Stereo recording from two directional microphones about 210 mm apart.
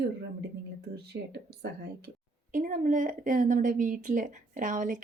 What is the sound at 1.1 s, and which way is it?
Speech, 60° right (ahead or behind).